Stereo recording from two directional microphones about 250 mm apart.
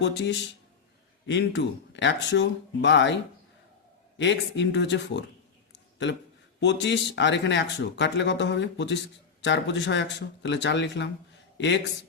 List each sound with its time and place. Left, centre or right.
0.0 s speech: left
4.2 s speech: left
5.7 s a sound: left
6.6 s speech: left